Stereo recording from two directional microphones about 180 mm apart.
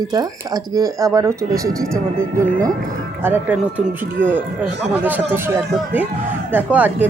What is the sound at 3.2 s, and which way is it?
Speech, 10° right (ahead or behind).